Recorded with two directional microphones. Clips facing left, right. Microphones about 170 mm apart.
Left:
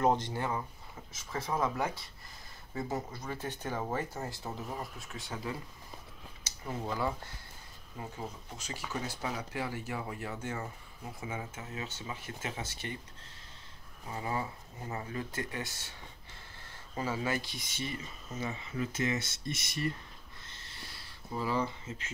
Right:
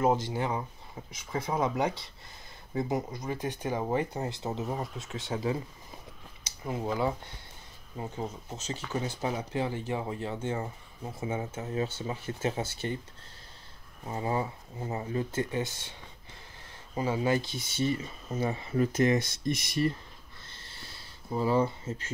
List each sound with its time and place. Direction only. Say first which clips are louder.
0.0 s speech: right 2 dB; 5° right (ahead or behind); by 5.6 s 25° right (ahead or behind)
6.6 s speech: right 5 dB; 15° right (ahead or behind); by 12.9 s 30° right (ahead or behind)
14.0 s speech: right 5 dB; 30° right (ahead or behind)
16.9 s speech: right 6 dB; 20° right (ahead or behind); by 19.2 s 40° right (ahead or behind)
20.4 s a sound: right 2 dB; 30° right (ahead or behind)
21.3 s speech: right 6 dB; 30° right (ahead or behind)